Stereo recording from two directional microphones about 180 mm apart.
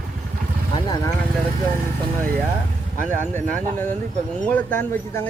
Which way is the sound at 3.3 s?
10° left (ahead or behind).